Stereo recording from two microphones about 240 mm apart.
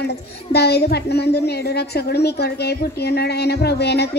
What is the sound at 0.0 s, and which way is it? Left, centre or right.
A woman's voice, left.